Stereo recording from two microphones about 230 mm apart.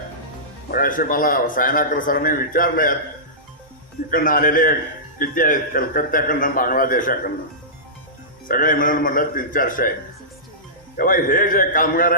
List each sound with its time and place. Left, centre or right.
0.7 s a man's voice: left
4.1 s a man's voice: left
8.4 s a man's voice: left
10.9 s a man's voice: left